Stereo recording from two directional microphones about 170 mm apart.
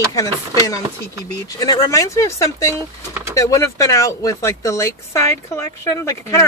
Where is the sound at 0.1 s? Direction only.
20° left (ahead or behind).